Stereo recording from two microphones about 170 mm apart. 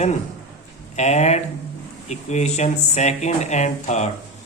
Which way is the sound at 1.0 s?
40° left (ahead or behind).